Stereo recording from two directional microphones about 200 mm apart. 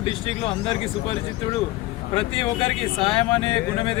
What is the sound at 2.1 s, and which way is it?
Speech, 25° left (ahead or behind).